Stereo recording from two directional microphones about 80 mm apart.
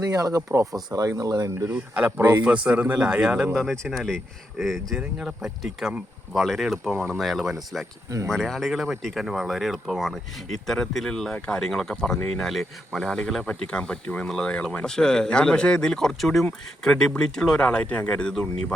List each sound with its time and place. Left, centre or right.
0.0 s speech: right
1.7 s a man's voice: right
3.6 s speech: centre